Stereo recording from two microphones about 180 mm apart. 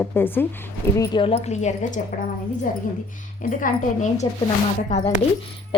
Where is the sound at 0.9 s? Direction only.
30° left (ahead or behind); by 2.1 s 45° left (ahead or behind).